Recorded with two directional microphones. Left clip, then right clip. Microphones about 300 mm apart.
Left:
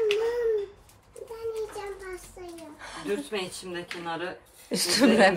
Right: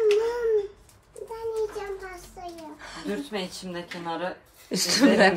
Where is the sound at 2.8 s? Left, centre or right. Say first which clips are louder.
Left 3 dB; centre.